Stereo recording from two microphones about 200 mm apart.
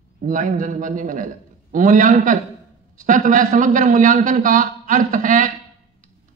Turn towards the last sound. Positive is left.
turn(degrees=-40)  # may be behind; listen again after turning